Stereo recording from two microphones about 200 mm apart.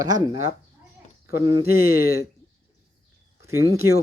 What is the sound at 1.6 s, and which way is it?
Speech, 50° left (ahead or behind).